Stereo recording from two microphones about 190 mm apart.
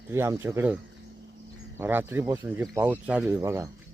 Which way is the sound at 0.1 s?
15° right (ahead or behind).